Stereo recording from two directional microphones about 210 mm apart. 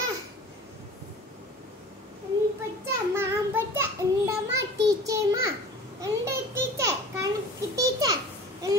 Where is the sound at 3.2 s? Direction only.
10° right (ahead or behind).